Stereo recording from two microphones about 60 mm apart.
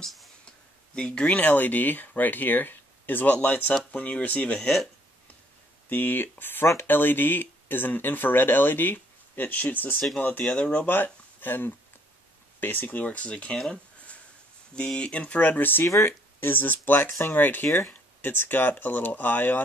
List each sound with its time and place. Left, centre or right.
0.0 s a sound: centre
0.9 s speech: centre
4.6 s speech: centre
5.9 s speech: left
10.4 s speech: centre
10.9 s speech: left
14.8 s speech: centre; by 17.6 s left
17.6 s speech: left
18.2 s speech: left